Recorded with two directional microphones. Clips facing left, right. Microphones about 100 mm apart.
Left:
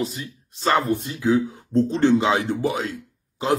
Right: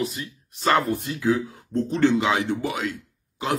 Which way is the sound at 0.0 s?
30° left (ahead or behind).